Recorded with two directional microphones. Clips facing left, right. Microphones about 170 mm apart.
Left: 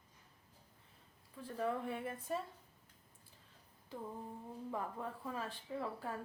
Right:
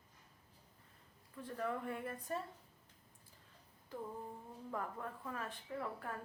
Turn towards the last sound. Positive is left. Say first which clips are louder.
# left 2 dB
turn(degrees=20)  # may be behind; listen again after turning